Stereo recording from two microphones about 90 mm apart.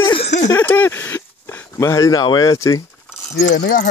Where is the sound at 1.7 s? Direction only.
40° left (ahead or behind).